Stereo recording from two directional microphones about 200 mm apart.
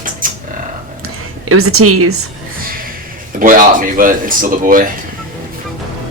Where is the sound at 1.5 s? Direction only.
90° right.